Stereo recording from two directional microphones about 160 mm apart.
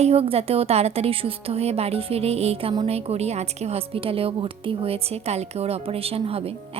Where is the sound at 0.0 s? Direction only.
40° right (ahead or behind).